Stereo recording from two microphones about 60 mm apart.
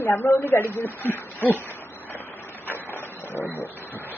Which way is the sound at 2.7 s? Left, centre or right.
Left.